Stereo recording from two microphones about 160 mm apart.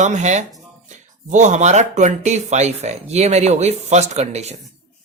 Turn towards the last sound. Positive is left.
turn(degrees=-45)  # may be behind; listen again after turning